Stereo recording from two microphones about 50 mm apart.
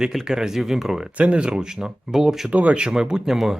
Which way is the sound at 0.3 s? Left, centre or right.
Centre.